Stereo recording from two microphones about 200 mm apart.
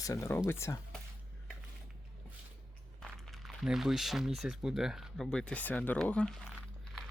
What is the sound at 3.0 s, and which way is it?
Speech, centre (ahead or behind).